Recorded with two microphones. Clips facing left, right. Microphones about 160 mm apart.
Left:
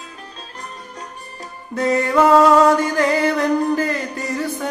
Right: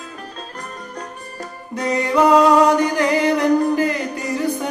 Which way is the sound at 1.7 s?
20° right (ahead or behind).